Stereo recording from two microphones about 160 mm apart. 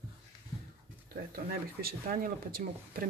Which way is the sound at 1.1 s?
70° right (ahead or behind).